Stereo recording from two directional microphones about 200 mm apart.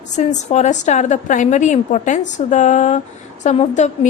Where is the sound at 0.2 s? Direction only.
35° left (ahead or behind).